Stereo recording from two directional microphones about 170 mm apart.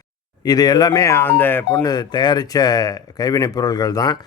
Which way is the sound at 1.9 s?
25° left (ahead or behind).